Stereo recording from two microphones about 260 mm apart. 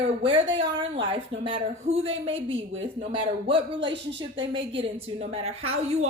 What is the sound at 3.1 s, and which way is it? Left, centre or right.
A woman's voice, centre.